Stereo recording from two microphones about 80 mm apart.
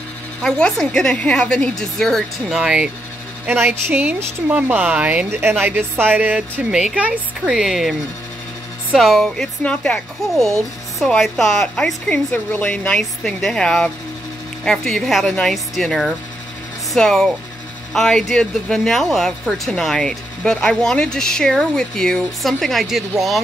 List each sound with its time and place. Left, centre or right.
0.4 s speech: centre
2.5 s a woman's voice: centre
3.4 s a woman's voice: right
3.9 s a woman's voice: centre
6.7 s a woman's voice: centre
8.9 s speech: centre
9.6 s speech: centre
11.1 s speech: centre
11.7 s speech: centre